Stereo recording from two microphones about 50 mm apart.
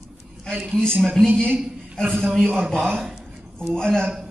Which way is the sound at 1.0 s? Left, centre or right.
Centre.